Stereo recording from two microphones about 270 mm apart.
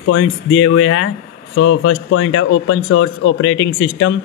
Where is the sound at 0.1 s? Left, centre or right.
Left.